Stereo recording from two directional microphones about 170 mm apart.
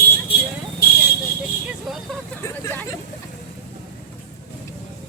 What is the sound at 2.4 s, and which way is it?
Hubbub, 15° left (ahead or behind).